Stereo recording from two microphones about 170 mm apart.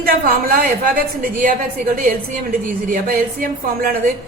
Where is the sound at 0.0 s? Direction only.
60° right (ahead or behind).